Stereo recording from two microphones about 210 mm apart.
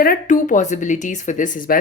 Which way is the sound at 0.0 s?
40° left (ahead or behind).